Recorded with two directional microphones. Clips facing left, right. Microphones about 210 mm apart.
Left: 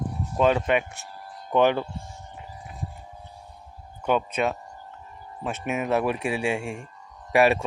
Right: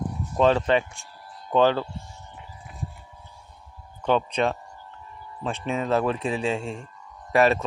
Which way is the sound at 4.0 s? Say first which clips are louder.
Right 1 dB; 10° left (ahead or behind).